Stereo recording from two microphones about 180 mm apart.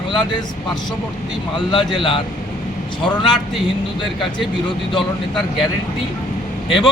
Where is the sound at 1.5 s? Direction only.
25° left (ahead or behind).